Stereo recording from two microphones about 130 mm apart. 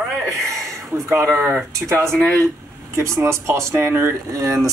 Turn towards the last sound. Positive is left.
turn(degrees=-25)  # may be behind; listen again after turning